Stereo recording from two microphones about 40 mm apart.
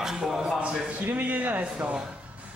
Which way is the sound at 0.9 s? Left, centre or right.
Right.